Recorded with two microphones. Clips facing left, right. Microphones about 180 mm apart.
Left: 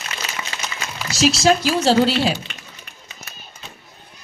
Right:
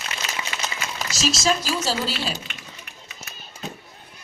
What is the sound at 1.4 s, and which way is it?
Speech, 65° left (ahead or behind).